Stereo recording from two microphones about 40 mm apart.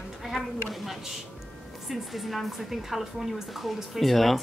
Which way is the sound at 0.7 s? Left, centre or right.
Centre.